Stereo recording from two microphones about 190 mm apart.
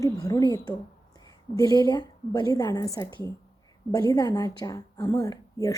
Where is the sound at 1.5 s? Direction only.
20° left (ahead or behind).